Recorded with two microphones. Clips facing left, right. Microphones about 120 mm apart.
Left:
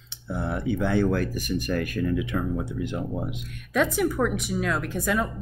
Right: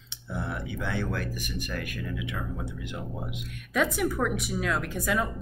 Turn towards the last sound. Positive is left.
turn(degrees=0)  # may be behind; listen again after turning